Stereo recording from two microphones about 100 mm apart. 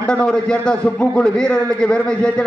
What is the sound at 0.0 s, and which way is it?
A man's voice, 10° left (ahead or behind).